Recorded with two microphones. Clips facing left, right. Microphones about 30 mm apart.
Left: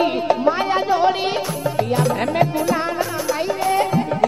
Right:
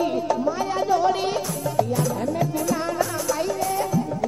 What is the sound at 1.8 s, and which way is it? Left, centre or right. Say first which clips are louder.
Music: left 5 dB; left.